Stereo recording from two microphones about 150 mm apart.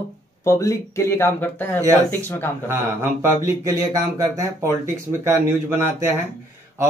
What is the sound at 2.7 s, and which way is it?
Speech, 15° right (ahead or behind).